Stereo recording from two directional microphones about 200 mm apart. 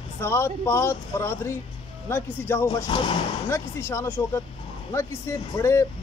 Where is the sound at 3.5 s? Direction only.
15° left (ahead or behind).